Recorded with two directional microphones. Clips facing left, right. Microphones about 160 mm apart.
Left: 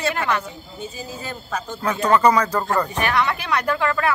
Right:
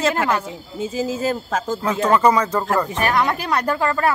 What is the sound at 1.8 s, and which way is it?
Speech, 20° right (ahead or behind).